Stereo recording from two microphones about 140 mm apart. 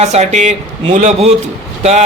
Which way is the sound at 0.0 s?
50° right (ahead or behind).